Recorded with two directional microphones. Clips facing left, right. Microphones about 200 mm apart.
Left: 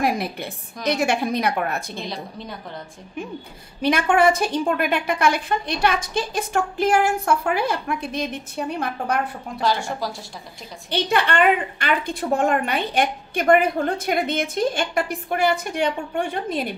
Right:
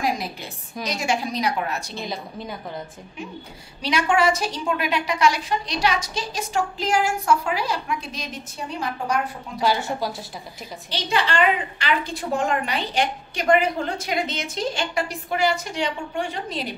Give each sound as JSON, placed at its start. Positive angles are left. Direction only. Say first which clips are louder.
{"t": 0.0, "sound": "a woman's voice", "louder": "left 3 dB", "side_deg": 60}
{"t": 2.0, "sound": "a woman's voice", "louder": "even", "side_deg": 0}
{"t": 3.8, "sound": "a woman's voice", "louder": "left 3 dB", "side_deg": 55}
{"t": 9.6, "sound": "a woman's voice", "louder": "right 1 dB", "side_deg": -5}
{"t": 10.9, "sound": "a woman's voice", "louder": "left 3 dB", "side_deg": 55}